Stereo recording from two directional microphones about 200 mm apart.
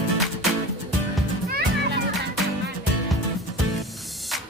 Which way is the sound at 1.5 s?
50° right (ahead or behind).